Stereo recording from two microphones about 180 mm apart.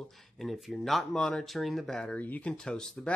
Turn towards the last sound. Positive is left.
turn(degrees=5)  # may be behind; listen again after turning